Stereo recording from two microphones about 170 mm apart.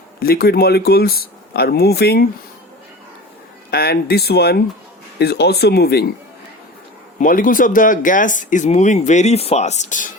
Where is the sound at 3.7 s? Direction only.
65° left (ahead or behind).